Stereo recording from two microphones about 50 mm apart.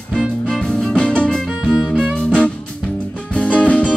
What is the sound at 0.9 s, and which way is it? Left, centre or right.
Music, centre.